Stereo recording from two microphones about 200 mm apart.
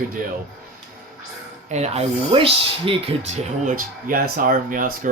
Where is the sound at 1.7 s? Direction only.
30° right (ahead or behind).